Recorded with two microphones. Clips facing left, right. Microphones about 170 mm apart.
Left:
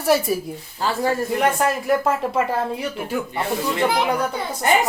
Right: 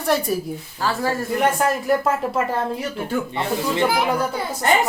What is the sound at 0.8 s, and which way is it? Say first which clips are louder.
Speech: left 1 dB; 20° left (ahead or behind).